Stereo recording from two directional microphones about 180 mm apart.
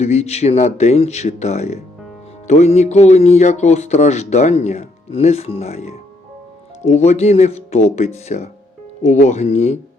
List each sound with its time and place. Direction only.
0.0 s speech: 35° left (ahead or behind)